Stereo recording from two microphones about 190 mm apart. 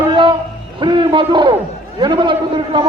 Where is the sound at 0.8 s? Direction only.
25° right (ahead or behind).